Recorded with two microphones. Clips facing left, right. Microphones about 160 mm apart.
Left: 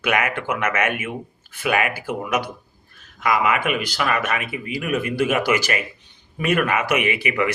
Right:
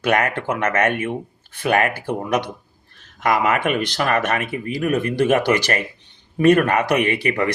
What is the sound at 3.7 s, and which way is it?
Speech, 40° right (ahead or behind).